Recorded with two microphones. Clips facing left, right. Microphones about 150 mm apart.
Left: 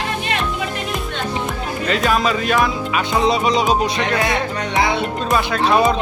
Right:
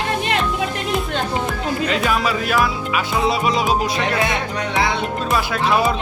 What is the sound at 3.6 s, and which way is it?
Music, centre (ahead or behind).